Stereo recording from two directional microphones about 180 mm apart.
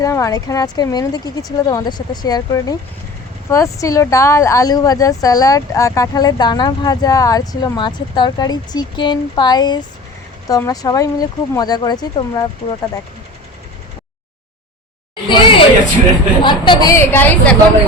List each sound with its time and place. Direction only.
0.0 s speech: 20° left (ahead or behind)
15.1 s a woman's voice: 30° left (ahead or behind); by 17.6 s 10° left (ahead or behind)